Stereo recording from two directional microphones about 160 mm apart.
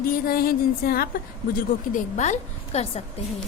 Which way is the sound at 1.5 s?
50° left (ahead or behind).